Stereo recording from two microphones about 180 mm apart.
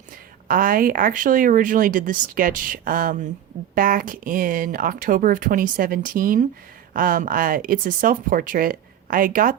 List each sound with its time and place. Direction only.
0.4 s speech: 50° right (ahead or behind)